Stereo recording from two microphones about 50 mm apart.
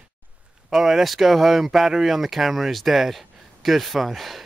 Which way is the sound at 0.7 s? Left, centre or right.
Centre.